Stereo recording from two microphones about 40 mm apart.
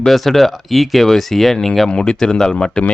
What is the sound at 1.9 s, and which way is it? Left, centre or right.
Speech, left.